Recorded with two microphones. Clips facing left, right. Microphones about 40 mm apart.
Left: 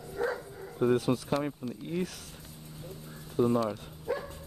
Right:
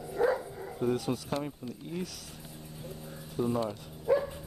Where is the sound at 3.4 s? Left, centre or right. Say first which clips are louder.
Left 5 dB; centre.